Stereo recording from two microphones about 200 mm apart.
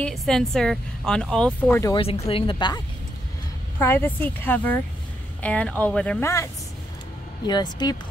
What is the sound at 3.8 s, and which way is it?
Speech, 10° left (ahead or behind).